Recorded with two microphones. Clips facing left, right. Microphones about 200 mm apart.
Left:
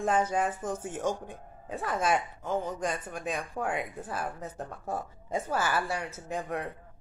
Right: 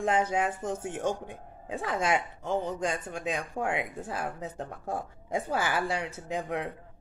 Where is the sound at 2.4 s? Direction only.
25° right (ahead or behind).